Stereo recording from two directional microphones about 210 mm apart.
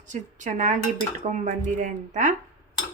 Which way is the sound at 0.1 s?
35° right (ahead or behind).